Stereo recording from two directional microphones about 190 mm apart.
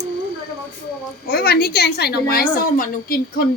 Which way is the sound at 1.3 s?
55° left (ahead or behind).